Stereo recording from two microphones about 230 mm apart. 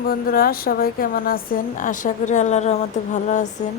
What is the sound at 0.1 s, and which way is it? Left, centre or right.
A woman's voice, left.